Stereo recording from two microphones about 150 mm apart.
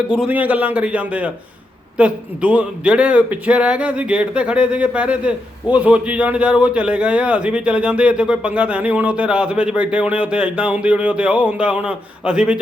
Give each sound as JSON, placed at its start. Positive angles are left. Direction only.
{"t": 0.1, "sound": "a man's voice", "side_deg": -10}